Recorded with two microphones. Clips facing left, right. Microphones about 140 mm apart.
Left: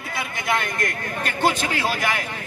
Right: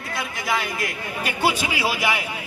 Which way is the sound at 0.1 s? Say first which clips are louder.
Left 1 dB; 5° right (ahead or behind).